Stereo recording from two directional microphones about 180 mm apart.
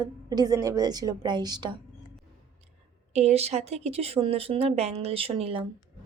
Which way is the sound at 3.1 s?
35° right (ahead or behind).